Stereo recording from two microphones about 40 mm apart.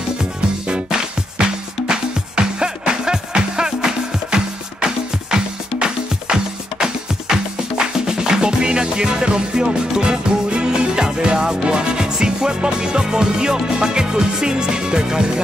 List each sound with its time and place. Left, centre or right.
0.2 s music: right